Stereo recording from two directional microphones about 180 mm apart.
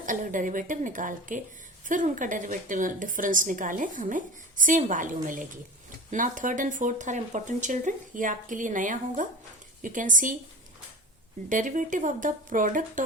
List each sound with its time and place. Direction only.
0.0 s a woman's voice: 45° right (ahead or behind)
11.4 s a woman's voice: 45° right (ahead or behind)